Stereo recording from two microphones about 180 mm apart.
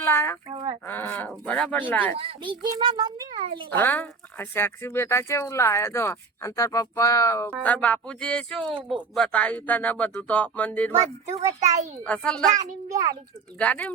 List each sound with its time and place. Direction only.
0.0 s a sound: 15° left (ahead or behind)
0.4 s a sound: 30° right (ahead or behind)
0.9 s speech: 10° left (ahead or behind)
2.1 s a child's voice: 30° right (ahead or behind)
3.8 s speech: 10° left (ahead or behind)
12.0 s speech: 5° left (ahead or behind)
12.9 s a child's voice: 20° right (ahead or behind)
13.6 s speech: 5° left (ahead or behind)